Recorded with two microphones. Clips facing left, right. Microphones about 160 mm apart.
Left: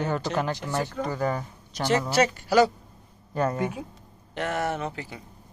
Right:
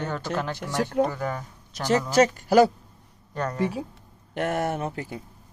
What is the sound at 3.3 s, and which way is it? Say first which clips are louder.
Speech: left 4 dB; 10° left (ahead or behind).